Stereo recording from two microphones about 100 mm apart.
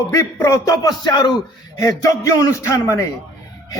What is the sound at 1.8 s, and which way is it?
A man's voice, 35° left (ahead or behind).